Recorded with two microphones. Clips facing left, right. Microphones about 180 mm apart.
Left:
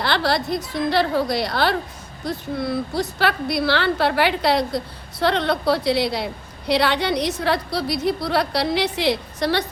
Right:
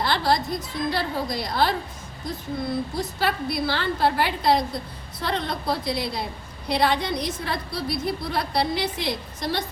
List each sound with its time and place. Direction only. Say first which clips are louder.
0.0 s a woman's voice: left 2 dB; 75° left (ahead or behind)